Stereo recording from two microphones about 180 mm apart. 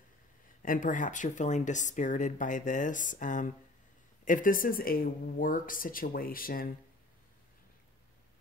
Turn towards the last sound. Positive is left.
turn(degrees=55)  # may be behind; listen again after turning